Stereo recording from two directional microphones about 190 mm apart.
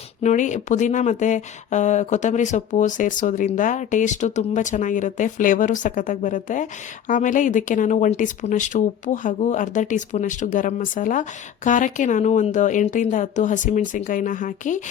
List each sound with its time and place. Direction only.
0.2 s speech: 40° left (ahead or behind)